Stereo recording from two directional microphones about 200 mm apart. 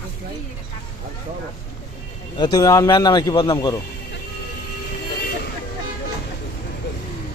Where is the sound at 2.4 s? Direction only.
20° left (ahead or behind).